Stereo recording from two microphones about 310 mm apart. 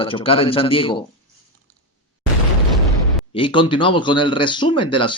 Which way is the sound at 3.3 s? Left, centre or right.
Centre.